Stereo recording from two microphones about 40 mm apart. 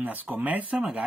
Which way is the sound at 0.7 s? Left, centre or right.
Right.